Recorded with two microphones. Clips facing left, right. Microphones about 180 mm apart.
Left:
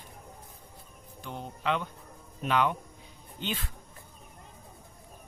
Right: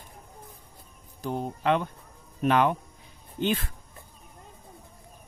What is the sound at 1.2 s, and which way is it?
Speech, 45° right (ahead or behind).